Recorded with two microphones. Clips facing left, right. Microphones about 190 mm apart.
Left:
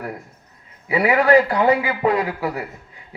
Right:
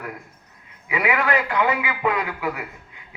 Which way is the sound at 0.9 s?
35° left (ahead or behind).